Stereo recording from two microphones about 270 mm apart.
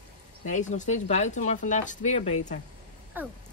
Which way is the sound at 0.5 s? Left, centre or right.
Left.